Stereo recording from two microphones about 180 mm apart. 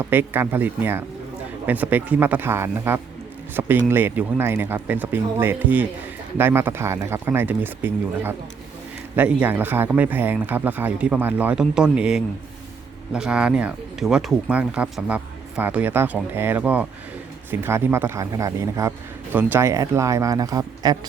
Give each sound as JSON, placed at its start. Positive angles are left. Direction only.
{"t": 0.0, "sound": "speech", "side_deg": -10}